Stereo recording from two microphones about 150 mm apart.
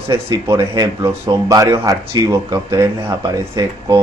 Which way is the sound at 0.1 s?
20° right (ahead or behind).